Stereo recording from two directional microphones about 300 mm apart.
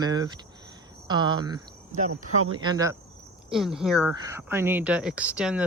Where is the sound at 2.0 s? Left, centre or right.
Right.